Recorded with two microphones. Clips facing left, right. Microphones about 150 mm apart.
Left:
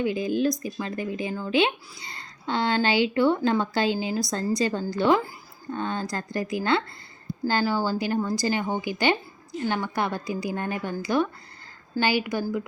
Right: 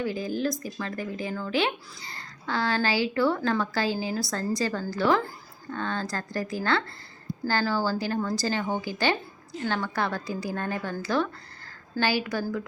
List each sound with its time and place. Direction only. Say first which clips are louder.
0.0 s a woman's voice: left 4 dB; 20° left (ahead or behind)